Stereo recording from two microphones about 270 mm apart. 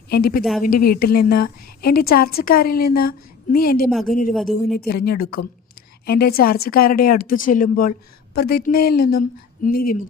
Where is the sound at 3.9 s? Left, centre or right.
Centre.